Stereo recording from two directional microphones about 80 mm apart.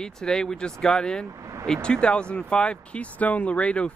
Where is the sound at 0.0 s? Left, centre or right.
Centre.